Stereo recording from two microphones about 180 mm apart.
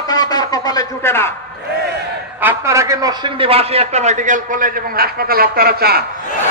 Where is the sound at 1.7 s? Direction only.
60° right (ahead or behind).